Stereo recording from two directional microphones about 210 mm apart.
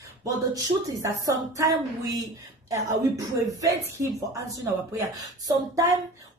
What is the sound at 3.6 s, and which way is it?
A woman's voice, 15° right (ahead or behind).